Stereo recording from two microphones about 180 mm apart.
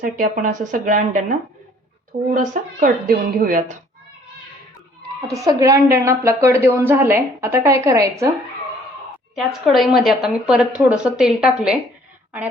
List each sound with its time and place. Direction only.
0.0 s a woman's voice: 50° right (ahead or behind)
5.3 s a woman's voice: 20° right (ahead or behind)
9.3 s a woman's voice: centre (ahead or behind)